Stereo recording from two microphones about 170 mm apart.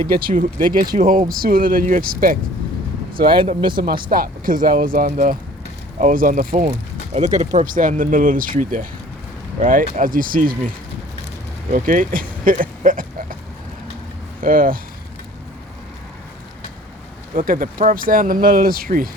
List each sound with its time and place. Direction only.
0.1 s speech: 60° right (ahead or behind)
3.2 s speech: 30° right (ahead or behind)
4.1 s speech: 55° right (ahead or behind)
7.1 s speech: 45° right (ahead or behind)
11.7 s speech: 50° right (ahead or behind)
14.4 s speech: 55° right (ahead or behind)
17.3 s speech: 55° right (ahead or behind)